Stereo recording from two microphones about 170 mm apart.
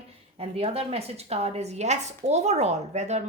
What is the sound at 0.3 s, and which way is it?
A woman's voice, 35° right (ahead or behind).